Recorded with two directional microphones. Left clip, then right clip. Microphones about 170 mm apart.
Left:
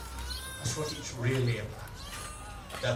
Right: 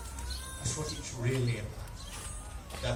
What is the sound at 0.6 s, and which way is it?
A man's voice, 30° left (ahead or behind).